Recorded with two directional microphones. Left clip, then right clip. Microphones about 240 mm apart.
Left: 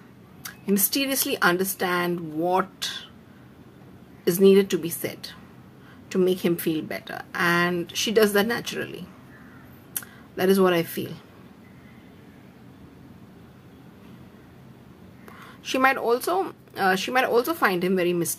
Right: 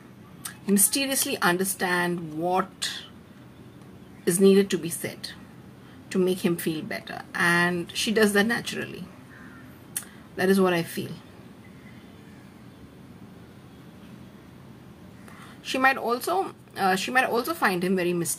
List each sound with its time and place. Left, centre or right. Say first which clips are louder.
0.4 s speech: even; centre
4.2 s speech: left 2 dB; centre
9.9 s speech: left 1 dB; centre
15.6 s speech: left 1 dB; centre